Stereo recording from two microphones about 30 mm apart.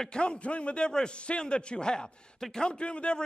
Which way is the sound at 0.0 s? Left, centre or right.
Left.